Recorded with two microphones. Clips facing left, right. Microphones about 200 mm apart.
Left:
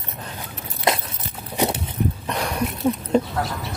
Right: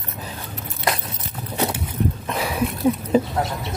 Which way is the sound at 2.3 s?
5° right (ahead or behind).